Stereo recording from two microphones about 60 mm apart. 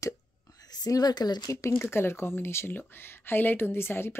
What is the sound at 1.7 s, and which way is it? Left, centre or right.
Speech, left.